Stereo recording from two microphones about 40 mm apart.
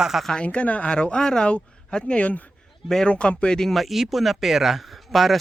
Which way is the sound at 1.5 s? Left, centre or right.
Left.